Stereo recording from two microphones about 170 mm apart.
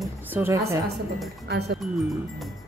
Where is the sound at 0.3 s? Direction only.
15° right (ahead or behind).